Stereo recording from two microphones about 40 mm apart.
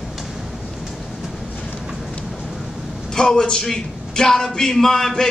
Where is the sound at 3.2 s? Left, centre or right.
Centre.